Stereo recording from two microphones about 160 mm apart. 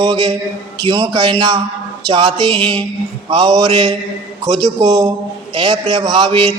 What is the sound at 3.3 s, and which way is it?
A man's voice, 25° right (ahead or behind).